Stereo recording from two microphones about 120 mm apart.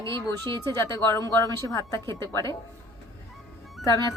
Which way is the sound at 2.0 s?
40° right (ahead or behind).